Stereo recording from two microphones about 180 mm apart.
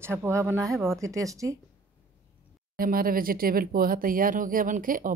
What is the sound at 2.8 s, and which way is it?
Speech, 55° right (ahead or behind).